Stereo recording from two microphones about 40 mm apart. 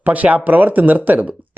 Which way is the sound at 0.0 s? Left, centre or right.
Right.